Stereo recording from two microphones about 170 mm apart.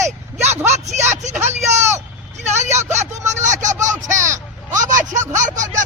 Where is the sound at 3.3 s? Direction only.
45° right (ahead or behind).